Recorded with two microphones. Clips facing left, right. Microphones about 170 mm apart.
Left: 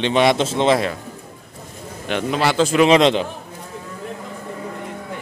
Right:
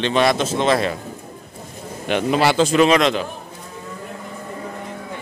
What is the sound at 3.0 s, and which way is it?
Speech, 25° left (ahead or behind).